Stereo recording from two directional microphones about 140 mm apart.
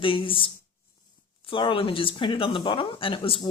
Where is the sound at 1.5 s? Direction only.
35° left (ahead or behind).